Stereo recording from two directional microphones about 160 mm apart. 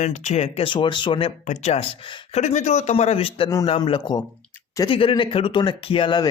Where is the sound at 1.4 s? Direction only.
45° left (ahead or behind).